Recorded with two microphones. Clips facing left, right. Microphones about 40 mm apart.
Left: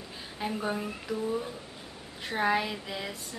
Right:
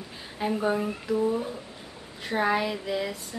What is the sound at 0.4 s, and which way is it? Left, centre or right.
Speech, centre.